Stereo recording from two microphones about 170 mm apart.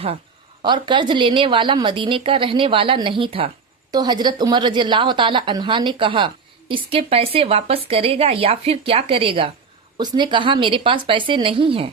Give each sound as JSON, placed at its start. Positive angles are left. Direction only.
{"t": 0.6, "sound": "a woman's voice", "side_deg": -25}